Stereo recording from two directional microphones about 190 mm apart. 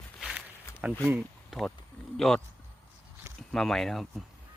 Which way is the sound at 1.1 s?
10° right (ahead or behind).